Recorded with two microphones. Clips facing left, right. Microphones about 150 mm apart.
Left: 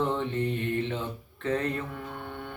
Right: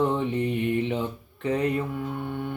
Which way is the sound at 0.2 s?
15° right (ahead or behind).